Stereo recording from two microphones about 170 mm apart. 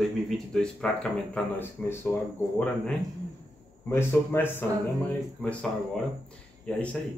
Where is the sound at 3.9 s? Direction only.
15° left (ahead or behind).